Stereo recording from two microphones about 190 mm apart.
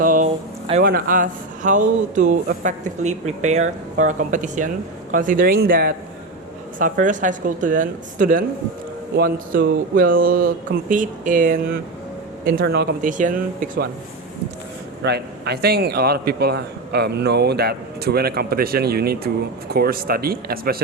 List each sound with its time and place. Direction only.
0.0 s a sound: 45° right (ahead or behind)
0.8 s speech: 50° right (ahead or behind)
12.5 s speech: 60° right (ahead or behind)
15.0 s a man's voice: 60° right (ahead or behind)